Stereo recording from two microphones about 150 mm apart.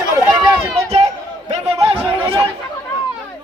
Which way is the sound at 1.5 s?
40° right (ahead or behind).